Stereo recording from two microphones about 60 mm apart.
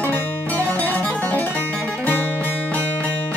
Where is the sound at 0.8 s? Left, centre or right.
Left.